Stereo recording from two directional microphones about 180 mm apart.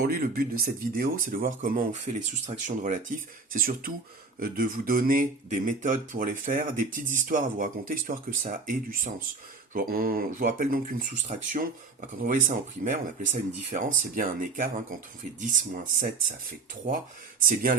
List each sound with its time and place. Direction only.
0.0 s speech: 55° right (ahead or behind)
17.4 s speech: 50° right (ahead or behind)